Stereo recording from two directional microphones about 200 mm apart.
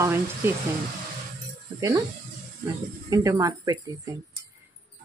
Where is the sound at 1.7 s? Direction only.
15° right (ahead or behind).